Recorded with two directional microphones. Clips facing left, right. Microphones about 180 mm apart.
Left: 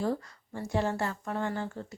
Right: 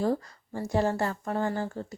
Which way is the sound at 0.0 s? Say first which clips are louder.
Right 4 dB; 40° right (ahead or behind).